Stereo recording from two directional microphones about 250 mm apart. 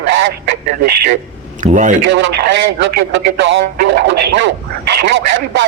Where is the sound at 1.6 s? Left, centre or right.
Right.